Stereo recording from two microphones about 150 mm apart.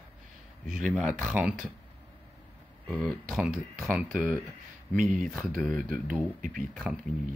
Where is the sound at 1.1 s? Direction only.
15° left (ahead or behind).